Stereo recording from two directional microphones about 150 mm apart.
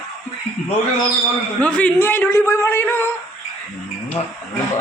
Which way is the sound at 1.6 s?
10° left (ahead or behind).